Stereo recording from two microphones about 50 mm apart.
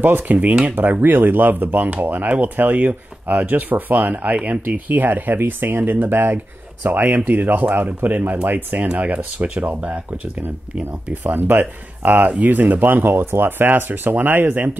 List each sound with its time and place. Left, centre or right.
0.0 s speech: right
11.2 s speech: right